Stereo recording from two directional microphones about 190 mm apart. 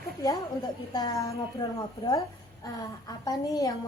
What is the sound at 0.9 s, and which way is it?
Speech, 20° left (ahead or behind).